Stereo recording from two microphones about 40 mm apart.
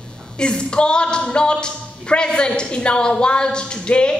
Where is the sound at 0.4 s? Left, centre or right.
Left.